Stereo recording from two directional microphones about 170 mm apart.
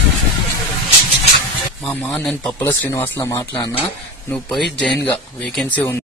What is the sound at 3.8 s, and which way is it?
Speech, 10° left (ahead or behind).